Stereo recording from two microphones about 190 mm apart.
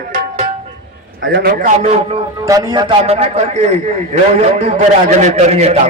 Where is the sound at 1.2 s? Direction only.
65° right (ahead or behind).